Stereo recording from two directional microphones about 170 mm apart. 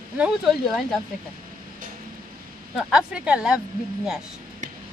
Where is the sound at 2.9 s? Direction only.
5° right (ahead or behind).